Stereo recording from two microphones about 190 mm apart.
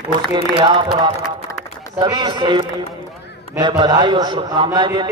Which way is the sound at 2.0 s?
25° right (ahead or behind).